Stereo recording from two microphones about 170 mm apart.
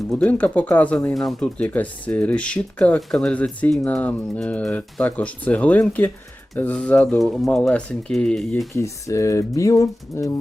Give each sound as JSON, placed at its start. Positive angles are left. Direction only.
{"t": 0.1, "sound": "speech", "side_deg": 5}
{"t": 8.7, "sound": "speech", "side_deg": 15}